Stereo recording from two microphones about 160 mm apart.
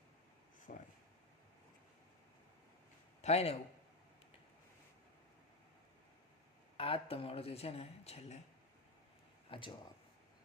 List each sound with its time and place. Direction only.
0.7 s speech: 60° left (ahead or behind)
3.2 s a man's voice: 40° left (ahead or behind)
6.7 s speech: 35° left (ahead or behind)
9.5 s speech: 30° left (ahead or behind)